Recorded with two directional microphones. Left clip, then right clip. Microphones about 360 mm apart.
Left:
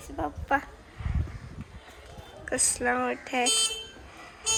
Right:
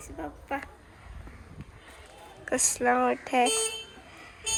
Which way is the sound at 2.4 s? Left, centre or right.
Centre.